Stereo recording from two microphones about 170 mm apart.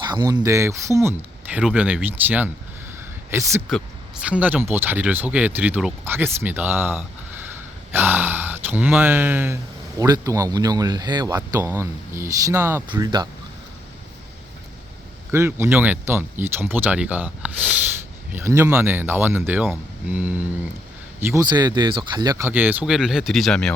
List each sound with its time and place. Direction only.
0.0 s speech: 25° right (ahead or behind)
3.7 s speech: 5° right (ahead or behind); by 13.2 s 25° right (ahead or behind)
15.3 s speech: 15° right (ahead or behind)
21.4 s speech: 25° right (ahead or behind); by 23.7 s 5° left (ahead or behind)